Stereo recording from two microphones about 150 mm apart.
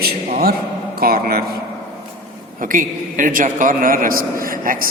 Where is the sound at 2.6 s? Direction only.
65° right (ahead or behind).